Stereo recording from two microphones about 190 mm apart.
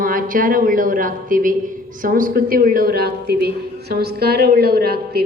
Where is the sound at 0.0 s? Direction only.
45° right (ahead or behind).